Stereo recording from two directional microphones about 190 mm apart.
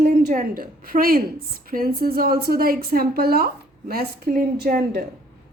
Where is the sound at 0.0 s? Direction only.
45° right (ahead or behind).